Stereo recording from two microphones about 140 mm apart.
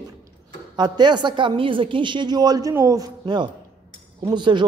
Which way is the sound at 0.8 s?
30° right (ahead or behind).